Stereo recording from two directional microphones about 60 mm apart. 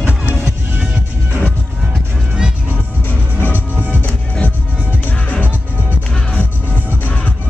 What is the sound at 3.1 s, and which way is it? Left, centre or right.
Music, left.